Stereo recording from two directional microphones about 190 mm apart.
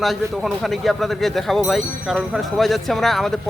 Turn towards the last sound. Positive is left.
turn(degrees=0)  # may be behind; listen again after turning